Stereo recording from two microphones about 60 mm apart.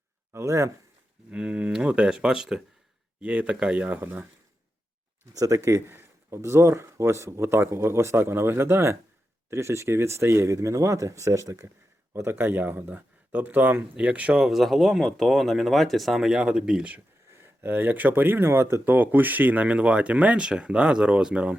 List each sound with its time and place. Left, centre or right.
0.3 s speech: right
1.3 s speech: centre
4.0 s speech: right
5.3 s speech: right
5.5 s speech: right
5.9 s a sound: right
6.4 s speech: right
12.1 s speech: right
14.4 s speech: centre
17.3 s speech: right; by 21.5 s centre